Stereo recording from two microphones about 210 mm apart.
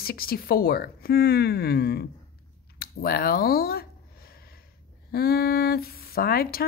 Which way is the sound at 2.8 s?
45° left (ahead or behind).